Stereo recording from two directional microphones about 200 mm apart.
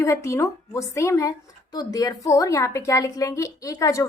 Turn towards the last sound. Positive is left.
turn(degrees=15)  # may be behind; listen again after turning